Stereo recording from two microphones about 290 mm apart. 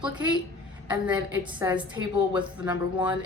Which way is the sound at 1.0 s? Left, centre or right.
Centre.